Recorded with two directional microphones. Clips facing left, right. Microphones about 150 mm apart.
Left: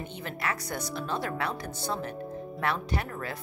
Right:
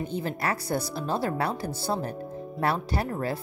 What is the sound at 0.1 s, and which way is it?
Speech, 35° right (ahead or behind).